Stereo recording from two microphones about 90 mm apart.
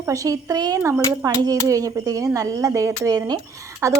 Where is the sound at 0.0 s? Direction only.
40° right (ahead or behind).